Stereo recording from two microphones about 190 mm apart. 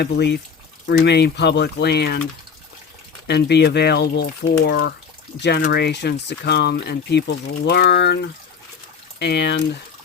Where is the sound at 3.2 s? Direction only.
60° left (ahead or behind).